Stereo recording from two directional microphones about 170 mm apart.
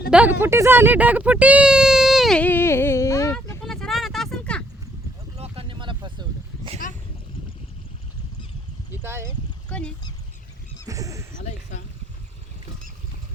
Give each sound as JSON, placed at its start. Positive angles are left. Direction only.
{"t": 0.1, "sound": "speech", "side_deg": -10}
{"t": 3.6, "sound": "vehicle", "side_deg": 0}
{"t": 5.4, "sound": "a sound", "side_deg": -30}
{"t": 8.9, "sound": "a sound", "side_deg": -15}
{"t": 9.6, "sound": "speech", "side_deg": 5}
{"t": 10.8, "sound": "horse", "side_deg": -20}